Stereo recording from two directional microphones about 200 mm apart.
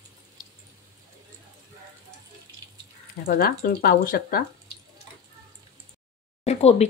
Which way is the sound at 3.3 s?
45° left (ahead or behind).